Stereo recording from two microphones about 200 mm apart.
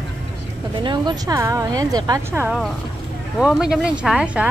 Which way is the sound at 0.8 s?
20° right (ahead or behind).